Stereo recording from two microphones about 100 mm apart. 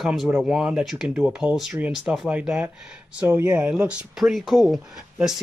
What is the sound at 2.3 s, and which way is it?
Speech, 15° right (ahead or behind).